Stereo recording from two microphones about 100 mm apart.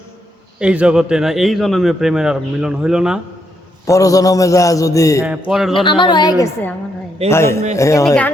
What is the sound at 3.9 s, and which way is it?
A man's voice, 35° left (ahead or behind).